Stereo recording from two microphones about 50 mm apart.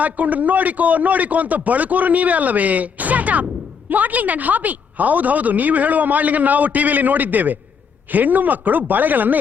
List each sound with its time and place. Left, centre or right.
0.0 s speech: right